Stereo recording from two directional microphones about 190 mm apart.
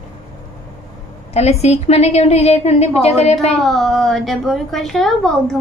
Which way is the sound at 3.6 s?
Centre (ahead or behind).